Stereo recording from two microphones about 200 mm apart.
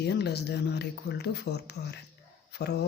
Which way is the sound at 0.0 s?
55° left (ahead or behind).